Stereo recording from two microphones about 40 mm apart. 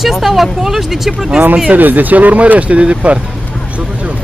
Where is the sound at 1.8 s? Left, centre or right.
Right.